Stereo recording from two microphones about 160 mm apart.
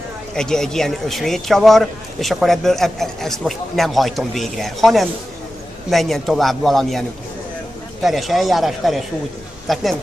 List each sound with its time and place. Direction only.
0.3 s speech: 5° left (ahead or behind)